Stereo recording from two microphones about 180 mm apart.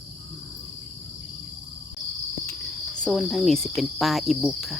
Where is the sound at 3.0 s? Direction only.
Centre (ahead or behind).